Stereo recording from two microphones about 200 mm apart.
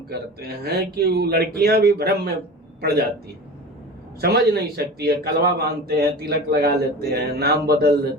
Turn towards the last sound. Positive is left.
turn(degrees=-50)  # may be behind; listen again after turning